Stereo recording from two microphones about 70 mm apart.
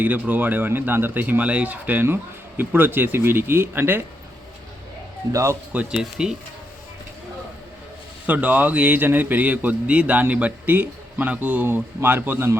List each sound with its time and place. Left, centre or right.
0.0 s a man's voice: right
5.3 s speech: right
5.7 s speech: centre
8.3 s a man's voice: right